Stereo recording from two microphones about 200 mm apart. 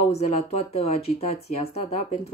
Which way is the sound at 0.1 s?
30° left (ahead or behind).